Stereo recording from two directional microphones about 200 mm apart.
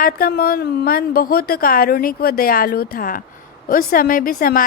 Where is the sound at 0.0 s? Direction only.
45° left (ahead or behind).